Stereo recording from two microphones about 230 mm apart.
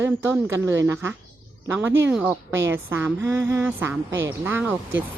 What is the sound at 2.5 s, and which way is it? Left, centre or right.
Speech, right.